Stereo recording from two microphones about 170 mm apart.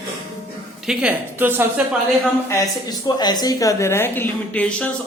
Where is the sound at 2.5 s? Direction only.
20° left (ahead or behind).